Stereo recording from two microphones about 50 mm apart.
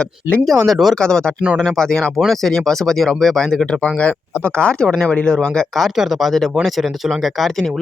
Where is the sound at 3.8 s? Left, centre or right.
Left.